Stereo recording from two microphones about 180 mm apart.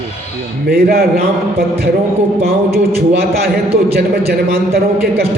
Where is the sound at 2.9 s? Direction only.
60° right (ahead or behind).